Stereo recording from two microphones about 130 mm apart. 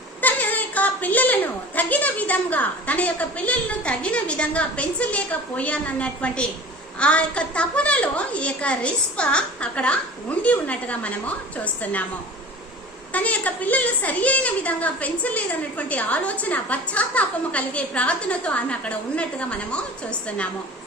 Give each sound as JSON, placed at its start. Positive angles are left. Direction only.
{"t": 0.2, "sound": "a woman's voice", "side_deg": 10}
{"t": 13.1, "sound": "a woman's voice", "side_deg": 10}